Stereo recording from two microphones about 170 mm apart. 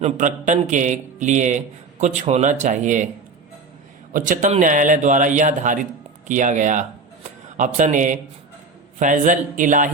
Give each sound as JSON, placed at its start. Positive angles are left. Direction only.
{"t": 0.0, "sound": "a man's voice", "side_deg": -45}
{"t": 4.1, "sound": "a man's voice", "side_deg": -50}